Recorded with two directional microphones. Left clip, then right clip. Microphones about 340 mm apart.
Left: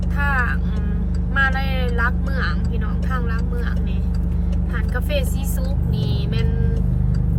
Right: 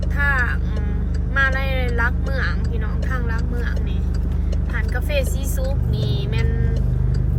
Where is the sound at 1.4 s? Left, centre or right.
Centre.